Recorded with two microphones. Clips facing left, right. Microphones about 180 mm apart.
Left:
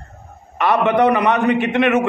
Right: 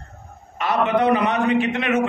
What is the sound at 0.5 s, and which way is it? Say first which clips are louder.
A man's voice: left 4 dB; 65° left (ahead or behind).